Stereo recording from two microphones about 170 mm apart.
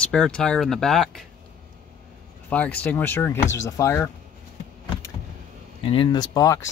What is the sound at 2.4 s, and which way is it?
Speech, 10° left (ahead or behind).